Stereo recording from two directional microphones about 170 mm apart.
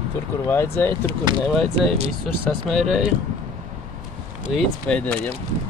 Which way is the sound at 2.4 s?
Centre (ahead or behind).